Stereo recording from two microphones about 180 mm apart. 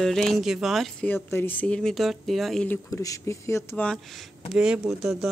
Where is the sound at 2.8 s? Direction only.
20° left (ahead or behind).